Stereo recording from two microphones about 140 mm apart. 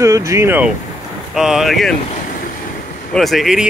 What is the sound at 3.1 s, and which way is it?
Speech, centre (ahead or behind).